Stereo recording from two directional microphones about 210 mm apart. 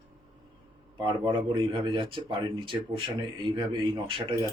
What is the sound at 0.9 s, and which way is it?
Speech, 20° right (ahead or behind).